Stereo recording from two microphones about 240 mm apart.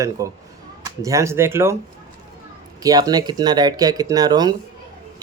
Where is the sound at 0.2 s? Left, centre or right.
Centre.